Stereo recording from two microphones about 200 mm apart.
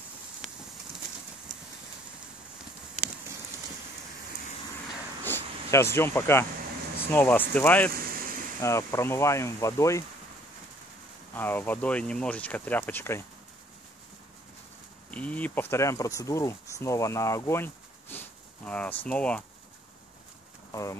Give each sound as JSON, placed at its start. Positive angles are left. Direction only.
{"t": 5.2, "sound": "a sound", "side_deg": 10}
{"t": 7.1, "sound": "speech", "side_deg": 10}
{"t": 8.0, "sound": "a sound", "side_deg": -45}
{"t": 8.5, "sound": "speech", "side_deg": 15}
{"t": 11.3, "sound": "speech", "side_deg": 10}
{"t": 15.0, "sound": "speech", "side_deg": 5}
{"t": 20.7, "sound": "speech", "side_deg": 15}